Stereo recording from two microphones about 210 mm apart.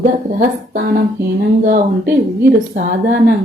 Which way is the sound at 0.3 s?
45° right (ahead or behind).